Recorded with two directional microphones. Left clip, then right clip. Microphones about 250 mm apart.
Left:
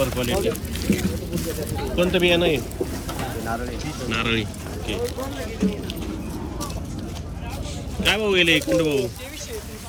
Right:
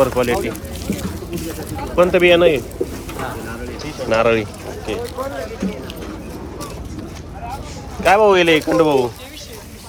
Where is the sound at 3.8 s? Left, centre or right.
Centre.